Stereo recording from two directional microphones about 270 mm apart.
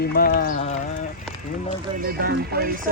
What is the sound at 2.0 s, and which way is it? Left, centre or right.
Speech, right.